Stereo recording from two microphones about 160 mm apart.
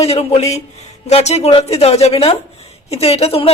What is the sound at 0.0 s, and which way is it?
A woman's voice, 40° left (ahead or behind).